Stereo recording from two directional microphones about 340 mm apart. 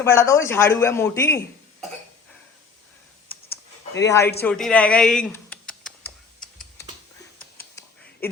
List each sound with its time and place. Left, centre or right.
0.0 s speech: centre
4.2 s a man's voice: left
4.4 s speech: centre
7.8 s a sound: centre